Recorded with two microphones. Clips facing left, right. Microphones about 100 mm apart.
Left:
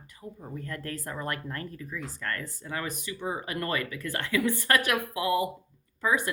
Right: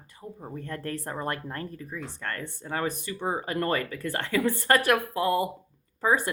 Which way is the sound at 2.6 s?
35° right (ahead or behind).